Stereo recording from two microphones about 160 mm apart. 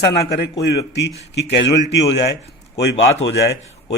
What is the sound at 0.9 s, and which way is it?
Speech, 90° left.